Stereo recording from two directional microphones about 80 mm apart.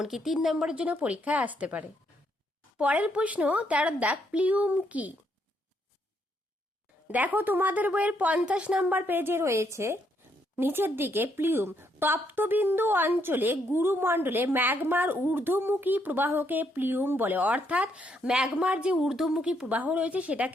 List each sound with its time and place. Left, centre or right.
0.0 s a woman's voice: centre
7.1 s speech: right
18.9 s a woman's voice: centre